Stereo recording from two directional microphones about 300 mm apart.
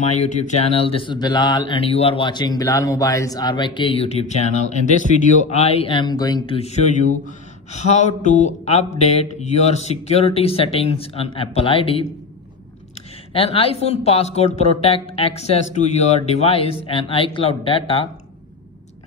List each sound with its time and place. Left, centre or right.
0.5 s speech: centre
13.3 s speech: centre